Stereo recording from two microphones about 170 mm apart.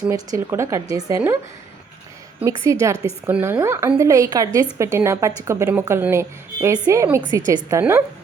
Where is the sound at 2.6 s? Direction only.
15° right (ahead or behind).